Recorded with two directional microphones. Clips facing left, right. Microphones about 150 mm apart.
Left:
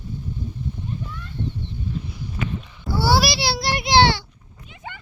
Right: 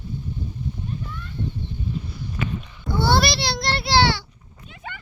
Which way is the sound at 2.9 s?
5° left (ahead or behind).